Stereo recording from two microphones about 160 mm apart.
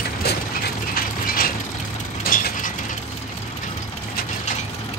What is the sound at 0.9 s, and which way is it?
Mechanisms, 65° left (ahead or behind).